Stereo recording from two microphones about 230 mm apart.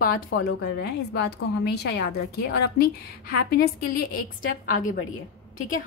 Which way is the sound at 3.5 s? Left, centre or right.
Left.